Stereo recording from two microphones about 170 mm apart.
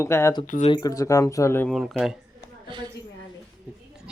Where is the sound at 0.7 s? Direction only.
20° left (ahead or behind).